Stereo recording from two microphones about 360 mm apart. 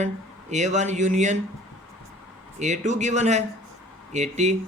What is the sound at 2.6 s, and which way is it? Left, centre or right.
Speech, centre.